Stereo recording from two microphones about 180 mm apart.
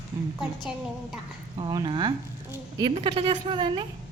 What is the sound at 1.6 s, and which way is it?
A woman's voice, 25° right (ahead or behind).